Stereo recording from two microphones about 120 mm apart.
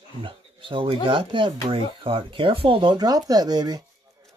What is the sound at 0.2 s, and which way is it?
Speech, 45° right (ahead or behind).